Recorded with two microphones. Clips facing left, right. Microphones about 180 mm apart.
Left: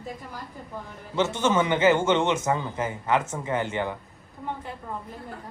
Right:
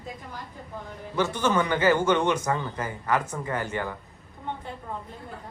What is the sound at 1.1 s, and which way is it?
A man's voice, 20° left (ahead or behind).